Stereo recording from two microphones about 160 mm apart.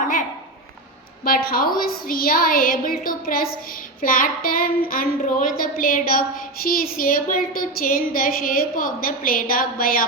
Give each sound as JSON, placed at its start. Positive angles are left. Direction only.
{"t": 1.2, "sound": "child singing", "side_deg": 65}